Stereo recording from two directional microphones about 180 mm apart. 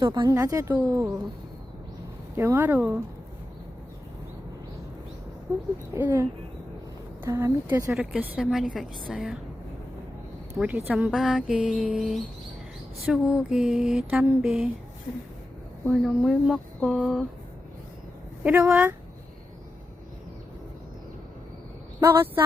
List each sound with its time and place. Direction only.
0.0 s speech: 25° right (ahead or behind)
2.3 s speech: 15° right (ahead or behind)
5.5 s speech: 15° right (ahead or behind)
7.3 s a woman's voice: 15° right (ahead or behind)
10.6 s a woman's voice: 10° right (ahead or behind)
15.9 s a woman's voice: centre (ahead or behind)
18.4 s a woman's voice: 5° right (ahead or behind)